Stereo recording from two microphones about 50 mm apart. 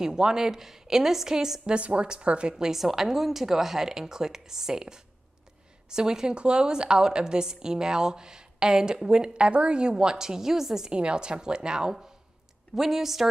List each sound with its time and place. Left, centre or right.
0.0 s a woman's voice: centre
1.8 s speech: right
2.5 s a woman's voice: centre